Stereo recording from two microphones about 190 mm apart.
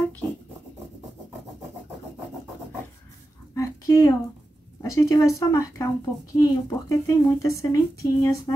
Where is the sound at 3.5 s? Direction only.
15° left (ahead or behind).